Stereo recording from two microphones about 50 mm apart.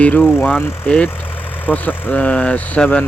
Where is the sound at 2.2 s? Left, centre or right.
Left.